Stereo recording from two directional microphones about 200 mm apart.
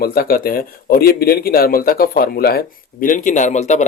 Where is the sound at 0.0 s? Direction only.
50° left (ahead or behind).